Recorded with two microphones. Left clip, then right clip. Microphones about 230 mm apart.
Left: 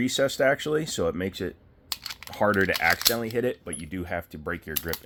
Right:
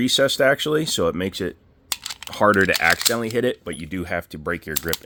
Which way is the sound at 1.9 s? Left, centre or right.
Right.